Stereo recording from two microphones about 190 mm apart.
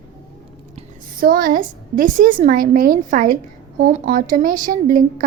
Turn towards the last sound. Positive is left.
turn(degrees=-45)  # may be behind; listen again after turning